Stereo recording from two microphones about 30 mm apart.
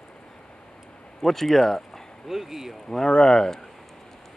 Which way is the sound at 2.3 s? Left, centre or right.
Centre.